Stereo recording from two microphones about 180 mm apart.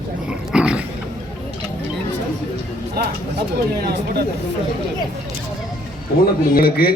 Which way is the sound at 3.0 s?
55° right (ahead or behind).